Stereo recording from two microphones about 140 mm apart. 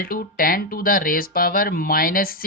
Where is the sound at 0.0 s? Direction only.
90° left.